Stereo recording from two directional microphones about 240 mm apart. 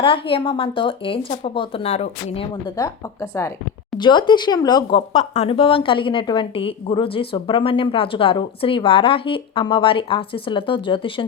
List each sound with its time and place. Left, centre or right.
0.0 s speech: left